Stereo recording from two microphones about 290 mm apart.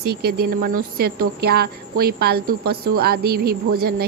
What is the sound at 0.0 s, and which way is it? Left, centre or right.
A woman's voice, right.